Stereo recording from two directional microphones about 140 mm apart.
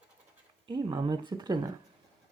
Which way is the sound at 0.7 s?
35° right (ahead or behind).